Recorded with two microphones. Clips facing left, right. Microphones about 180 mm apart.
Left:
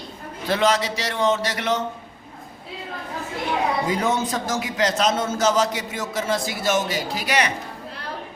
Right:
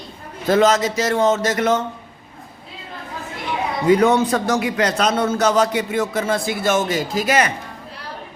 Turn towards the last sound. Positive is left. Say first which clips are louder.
# right 5 dB
turn(degrees=-50)  # may be behind; listen again after turning